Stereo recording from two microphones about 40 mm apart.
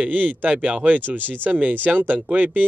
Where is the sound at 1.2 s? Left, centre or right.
Right.